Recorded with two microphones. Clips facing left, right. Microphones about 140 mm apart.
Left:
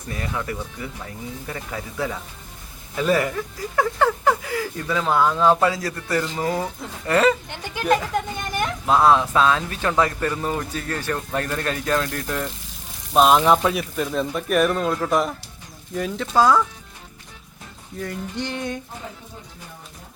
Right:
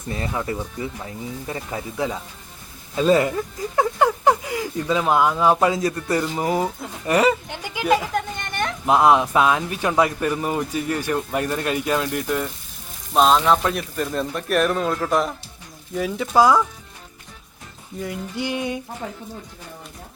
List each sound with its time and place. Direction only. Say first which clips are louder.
0.1 s speech: right 2 dB; 25° right (ahead or behind); by 8.2 s 10° right (ahead or behind)
8.4 s a sound: left 1 dB; 5° left (ahead or behind)
8.9 s speech: right 1 dB; 15° right (ahead or behind)
13.1 s speech: left 1 dB; 10° left (ahead or behind); by 16.6 s 10° right (ahead or behind)
18.0 s speech: right 1 dB; 10° right (ahead or behind)